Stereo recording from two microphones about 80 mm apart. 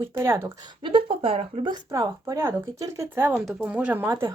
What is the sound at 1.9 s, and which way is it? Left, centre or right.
Speech, right.